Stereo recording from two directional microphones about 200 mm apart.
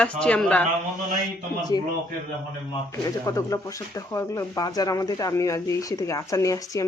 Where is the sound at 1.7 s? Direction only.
20° left (ahead or behind).